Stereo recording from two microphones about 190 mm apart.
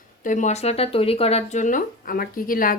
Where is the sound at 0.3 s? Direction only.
40° left (ahead or behind).